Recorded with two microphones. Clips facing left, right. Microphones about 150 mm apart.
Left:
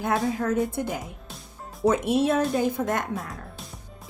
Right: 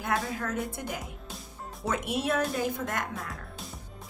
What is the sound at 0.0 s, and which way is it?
Speech, 30° left (ahead or behind).